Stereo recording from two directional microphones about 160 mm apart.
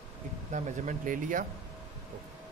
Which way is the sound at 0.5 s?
50° right (ahead or behind).